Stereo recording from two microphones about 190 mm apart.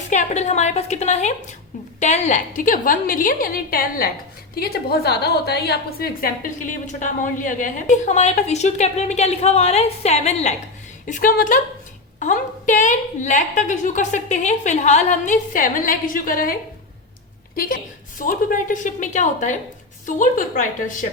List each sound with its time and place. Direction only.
0.1 s a woman's voice: 40° left (ahead or behind)
18.2 s a woman's voice: 45° left (ahead or behind)